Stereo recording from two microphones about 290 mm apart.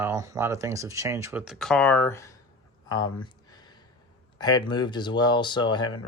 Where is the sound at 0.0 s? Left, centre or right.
Centre.